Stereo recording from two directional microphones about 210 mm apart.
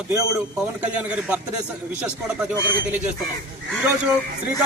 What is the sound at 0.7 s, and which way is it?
Speech, 5° right (ahead or behind).